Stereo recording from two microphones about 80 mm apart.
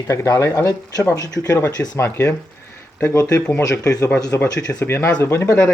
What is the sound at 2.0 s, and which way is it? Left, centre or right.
Speech, left.